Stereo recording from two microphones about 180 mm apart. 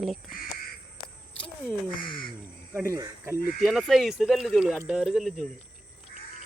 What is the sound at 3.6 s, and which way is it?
Speech, centre (ahead or behind).